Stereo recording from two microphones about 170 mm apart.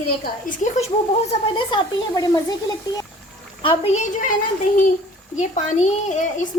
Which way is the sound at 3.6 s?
30° left (ahead or behind).